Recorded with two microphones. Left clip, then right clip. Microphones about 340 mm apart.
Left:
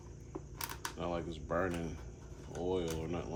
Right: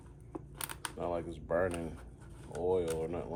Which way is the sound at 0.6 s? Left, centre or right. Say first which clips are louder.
Right 2 dB; right.